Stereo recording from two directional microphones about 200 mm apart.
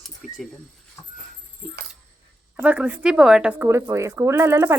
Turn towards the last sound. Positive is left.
turn(degrees=-10)  # may be behind; listen again after turning